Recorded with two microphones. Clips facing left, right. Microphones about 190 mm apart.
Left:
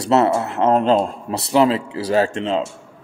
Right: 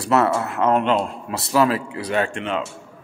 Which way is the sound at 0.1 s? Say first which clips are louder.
Left 3 dB; 25° left (ahead or behind).